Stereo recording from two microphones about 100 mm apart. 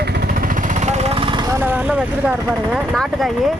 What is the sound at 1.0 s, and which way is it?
Vehicle, 80° right.